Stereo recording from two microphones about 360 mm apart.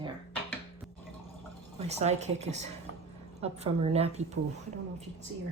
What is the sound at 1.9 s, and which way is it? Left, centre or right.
Speech, centre.